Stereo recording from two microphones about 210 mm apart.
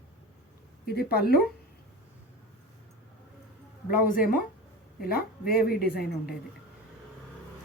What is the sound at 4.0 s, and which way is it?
A woman's voice, 40° left (ahead or behind).